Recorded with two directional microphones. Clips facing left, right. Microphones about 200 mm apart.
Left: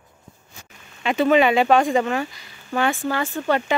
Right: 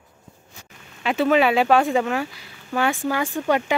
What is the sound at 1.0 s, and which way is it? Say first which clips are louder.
Speech: left 1 dB; 5° right (ahead or behind).